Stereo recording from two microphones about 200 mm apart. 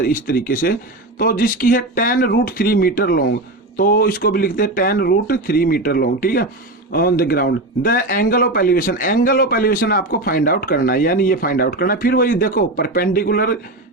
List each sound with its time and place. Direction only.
0.0 s a man's voice: 45° left (ahead or behind)